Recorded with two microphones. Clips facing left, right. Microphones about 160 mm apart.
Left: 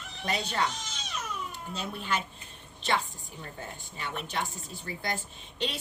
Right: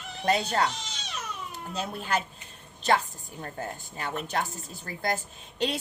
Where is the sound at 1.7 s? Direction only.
40° right (ahead or behind).